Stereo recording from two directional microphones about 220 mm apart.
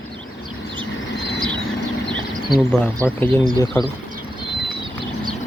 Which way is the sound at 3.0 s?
10° right (ahead or behind).